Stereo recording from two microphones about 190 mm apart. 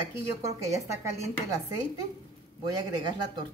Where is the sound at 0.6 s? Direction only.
15° right (ahead or behind).